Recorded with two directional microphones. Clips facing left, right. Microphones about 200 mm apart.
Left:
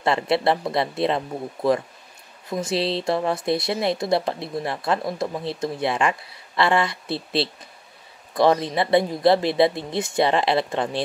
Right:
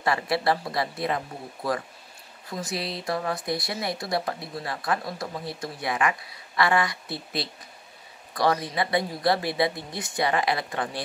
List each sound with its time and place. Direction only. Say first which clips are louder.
0.0 s speech: left 4 dB; 25° left (ahead or behind)
2.5 s speech: left 8 dB; 25° left (ahead or behind)